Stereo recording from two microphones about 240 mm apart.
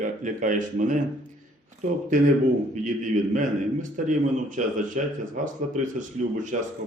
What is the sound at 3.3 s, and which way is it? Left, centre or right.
Speech, right.